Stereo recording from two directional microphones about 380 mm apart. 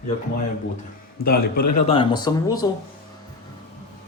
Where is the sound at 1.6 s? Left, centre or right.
Left.